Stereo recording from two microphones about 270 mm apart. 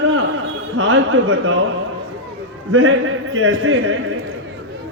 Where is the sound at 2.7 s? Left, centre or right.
Right.